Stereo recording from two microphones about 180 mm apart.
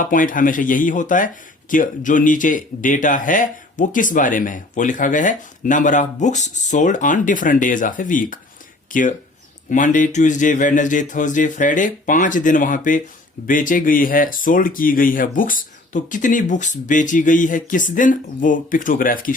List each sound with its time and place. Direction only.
0.0 s speech: 50° left (ahead or behind)